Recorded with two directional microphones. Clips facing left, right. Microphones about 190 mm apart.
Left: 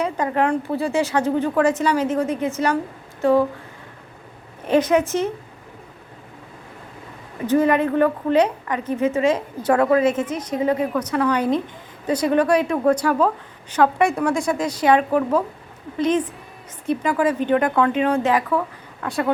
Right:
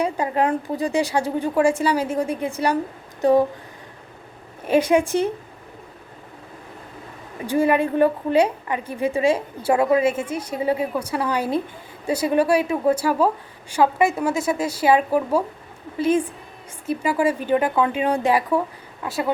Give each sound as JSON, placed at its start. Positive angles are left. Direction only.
{"t": 0.0, "sound": "a woman's voice", "side_deg": -15}
{"t": 4.6, "sound": "a woman's voice", "side_deg": -10}
{"t": 7.4, "sound": "a woman's voice", "side_deg": -10}